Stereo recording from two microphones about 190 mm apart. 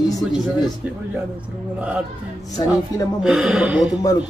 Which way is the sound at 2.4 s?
20° left (ahead or behind).